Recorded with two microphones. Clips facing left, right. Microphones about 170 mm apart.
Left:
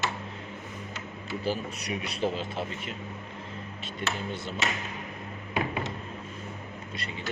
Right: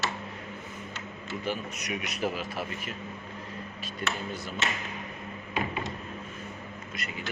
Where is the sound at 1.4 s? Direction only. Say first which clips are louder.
Left 2 dB; 30° left (ahead or behind).